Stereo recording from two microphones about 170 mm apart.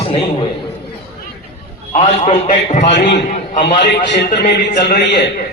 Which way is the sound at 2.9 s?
90° left.